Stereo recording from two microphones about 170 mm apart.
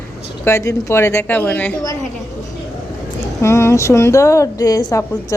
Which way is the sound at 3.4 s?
15° left (ahead or behind).